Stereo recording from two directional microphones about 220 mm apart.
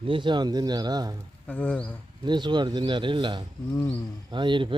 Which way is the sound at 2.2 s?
20° right (ahead or behind).